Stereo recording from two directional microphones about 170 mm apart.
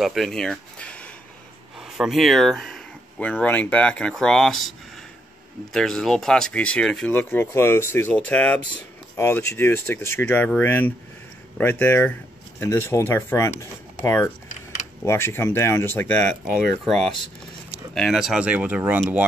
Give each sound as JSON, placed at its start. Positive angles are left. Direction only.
{"t": 0.0, "sound": "speech", "side_deg": 0}